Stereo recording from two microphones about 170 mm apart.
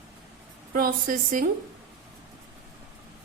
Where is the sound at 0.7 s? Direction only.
55° right (ahead or behind).